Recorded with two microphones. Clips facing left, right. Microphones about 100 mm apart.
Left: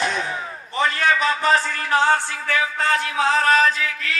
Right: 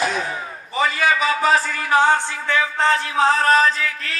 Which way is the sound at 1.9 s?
15° right (ahead or behind).